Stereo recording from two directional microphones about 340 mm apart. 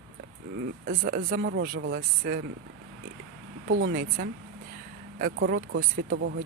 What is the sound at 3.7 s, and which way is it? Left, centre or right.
Speech, right.